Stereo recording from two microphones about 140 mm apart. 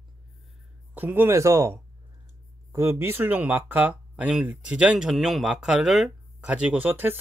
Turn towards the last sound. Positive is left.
turn(degrees=-15)  # may be behind; listen again after turning